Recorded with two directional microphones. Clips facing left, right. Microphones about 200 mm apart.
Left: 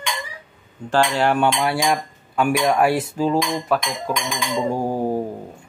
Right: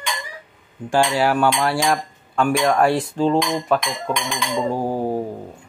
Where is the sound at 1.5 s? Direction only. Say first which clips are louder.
Right 1 dB; 5° left (ahead or behind).